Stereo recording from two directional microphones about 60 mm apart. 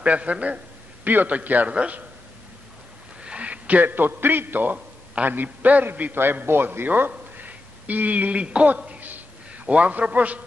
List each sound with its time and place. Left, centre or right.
0.0 s a man's voice: right
3.2 s a man's voice: right
4.7 s a sound: centre
5.3 s a man's voice: right
6.1 s a man's voice: right
7.1 s a sound: right
9.7 s a man's voice: right